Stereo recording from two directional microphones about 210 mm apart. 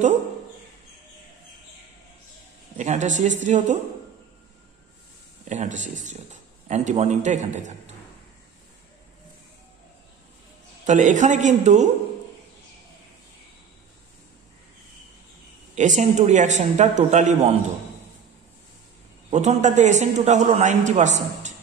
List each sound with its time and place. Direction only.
2.8 s a man's voice: 35° right (ahead or behind)
5.5 s a man's voice: 35° right (ahead or behind)
10.9 s a man's voice: 35° right (ahead or behind)
15.7 s a man's voice: 35° right (ahead or behind)
19.3 s a man's voice: 35° right (ahead or behind)